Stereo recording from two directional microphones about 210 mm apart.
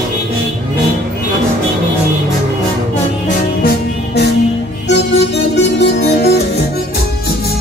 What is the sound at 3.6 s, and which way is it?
Music, 50° left (ahead or behind).